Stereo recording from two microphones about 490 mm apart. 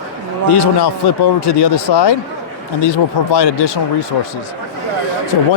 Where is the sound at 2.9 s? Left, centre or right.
Left.